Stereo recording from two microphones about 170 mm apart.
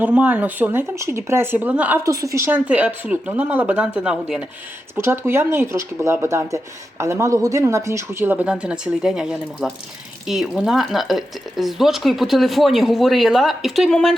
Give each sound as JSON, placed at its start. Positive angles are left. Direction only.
{"t": 0.0, "sound": "speech", "side_deg": -10}